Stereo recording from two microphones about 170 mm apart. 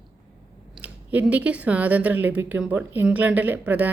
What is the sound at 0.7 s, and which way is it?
Speech, 10° right (ahead or behind).